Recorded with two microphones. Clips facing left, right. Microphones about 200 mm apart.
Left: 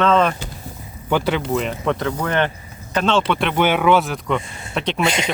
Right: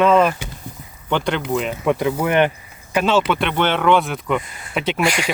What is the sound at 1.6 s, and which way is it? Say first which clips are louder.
Speech: right 2 dB; 5° right (ahead or behind).